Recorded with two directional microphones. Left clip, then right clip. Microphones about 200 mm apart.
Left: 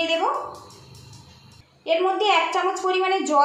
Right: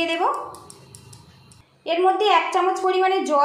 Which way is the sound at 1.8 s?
35° right (ahead or behind).